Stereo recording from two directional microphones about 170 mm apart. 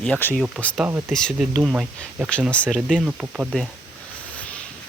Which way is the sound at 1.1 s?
Centre (ahead or behind).